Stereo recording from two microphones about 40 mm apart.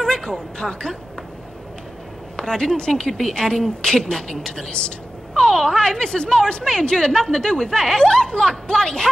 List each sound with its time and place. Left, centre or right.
0.1 s a woman's voice: centre
2.3 s a woman's voice: left